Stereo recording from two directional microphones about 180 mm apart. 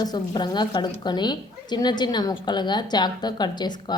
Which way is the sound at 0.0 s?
25° left (ahead or behind).